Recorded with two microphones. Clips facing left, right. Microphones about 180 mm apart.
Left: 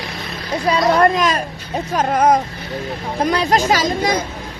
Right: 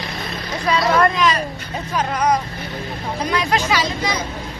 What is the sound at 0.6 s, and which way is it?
Speech, 40° left (ahead or behind).